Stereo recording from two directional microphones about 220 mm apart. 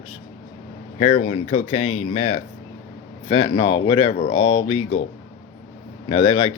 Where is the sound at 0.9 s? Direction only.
35° left (ahead or behind).